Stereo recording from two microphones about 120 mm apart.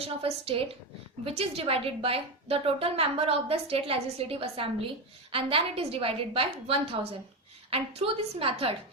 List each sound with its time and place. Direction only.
0.0 s a woman's voice: 55° right (ahead or behind)